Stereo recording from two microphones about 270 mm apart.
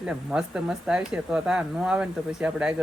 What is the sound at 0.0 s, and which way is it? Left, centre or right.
Speech, centre.